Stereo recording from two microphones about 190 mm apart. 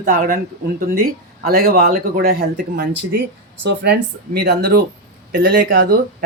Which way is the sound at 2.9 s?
65° right (ahead or behind).